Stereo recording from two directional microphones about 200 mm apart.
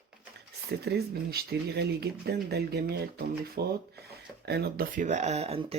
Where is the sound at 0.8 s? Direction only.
55° right (ahead or behind).